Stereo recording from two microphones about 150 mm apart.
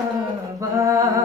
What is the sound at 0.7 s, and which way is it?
Music, 20° right (ahead or behind).